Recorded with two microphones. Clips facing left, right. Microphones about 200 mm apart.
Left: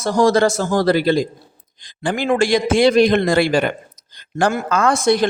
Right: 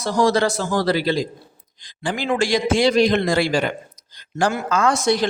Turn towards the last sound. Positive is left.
turn(degrees=55)  # may be behind; listen again after turning